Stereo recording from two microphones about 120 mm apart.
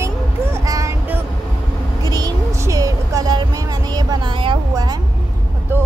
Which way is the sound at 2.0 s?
35° right (ahead or behind).